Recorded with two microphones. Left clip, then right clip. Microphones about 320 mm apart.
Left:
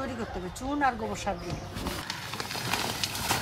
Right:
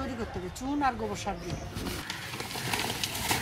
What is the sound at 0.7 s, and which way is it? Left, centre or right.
Speech, centre.